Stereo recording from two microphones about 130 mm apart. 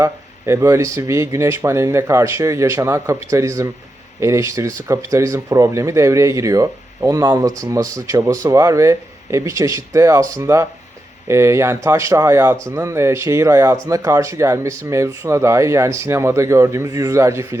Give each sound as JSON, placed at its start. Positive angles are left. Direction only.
{"t": 0.0, "sound": "speech", "side_deg": -20}